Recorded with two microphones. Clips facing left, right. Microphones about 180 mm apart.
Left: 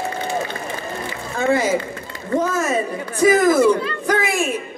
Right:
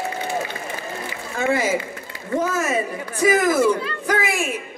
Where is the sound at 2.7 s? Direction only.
35° left (ahead or behind).